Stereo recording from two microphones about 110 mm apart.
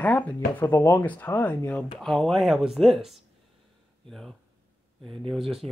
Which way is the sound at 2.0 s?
5° left (ahead or behind).